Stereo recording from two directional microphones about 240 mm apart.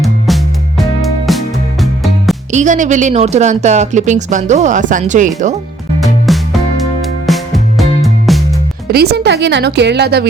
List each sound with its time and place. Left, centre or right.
0.0 s music: centre
2.5 s speech: right
6.0 s music: centre
8.9 s a woman's voice: right